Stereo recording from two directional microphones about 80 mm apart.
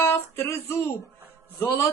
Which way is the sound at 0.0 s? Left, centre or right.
Left.